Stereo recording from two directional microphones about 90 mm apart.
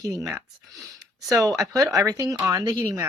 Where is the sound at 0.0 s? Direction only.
40° right (ahead or behind).